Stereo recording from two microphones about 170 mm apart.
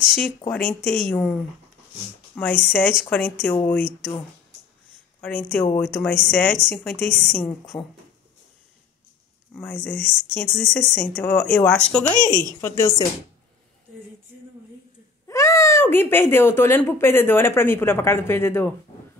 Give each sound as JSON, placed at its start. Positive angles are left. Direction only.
{"t": 0.0, "sound": "a sound", "side_deg": 0}
{"t": 0.5, "sound": "speech", "side_deg": 5}
{"t": 5.2, "sound": "speech", "side_deg": 5}
{"t": 7.7, "sound": "speech", "side_deg": 30}
{"t": 9.6, "sound": "speech", "side_deg": 5}
{"t": 15.2, "sound": "speech", "side_deg": 15}